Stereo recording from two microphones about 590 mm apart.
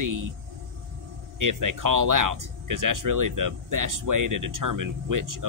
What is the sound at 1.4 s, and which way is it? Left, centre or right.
Speech, right.